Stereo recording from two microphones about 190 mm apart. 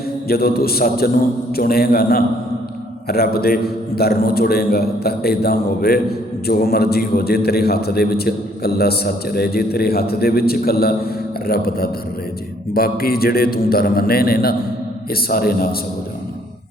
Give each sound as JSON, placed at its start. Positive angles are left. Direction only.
{"t": 0.3, "sound": "a man's voice", "side_deg": 55}